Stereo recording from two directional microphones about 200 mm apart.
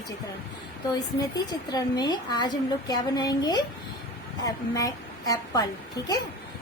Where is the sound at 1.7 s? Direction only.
20° left (ahead or behind).